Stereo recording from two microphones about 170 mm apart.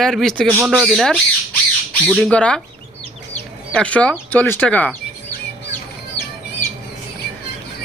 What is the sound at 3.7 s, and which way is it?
Speech, 10° left (ahead or behind).